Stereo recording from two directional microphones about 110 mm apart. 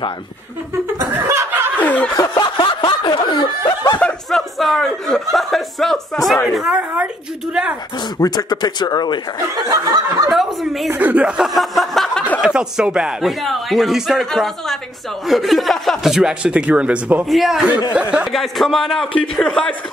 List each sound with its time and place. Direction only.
1.1 s snicker: 15° right (ahead or behind)
1.8 s snicker: 15° left (ahead or behind)
2.1 s snicker: 40° left (ahead or behind)
4.3 s a man's voice: centre (ahead or behind)
6.8 s speech: 15° right (ahead or behind)
8.2 s speech: 35° left (ahead or behind)
9.7 s snicker: 30° right (ahead or behind)
10.3 s speech: centre (ahead or behind)
10.9 s a man's voice: 15° right (ahead or behind)
17.3 s a man's voice: centre (ahead or behind)
18.3 s a man's voice: centre (ahead or behind)